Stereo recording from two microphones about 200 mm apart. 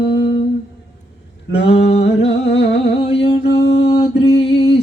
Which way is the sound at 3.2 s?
30° left (ahead or behind).